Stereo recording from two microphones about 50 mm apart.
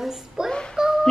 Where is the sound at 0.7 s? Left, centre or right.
Centre.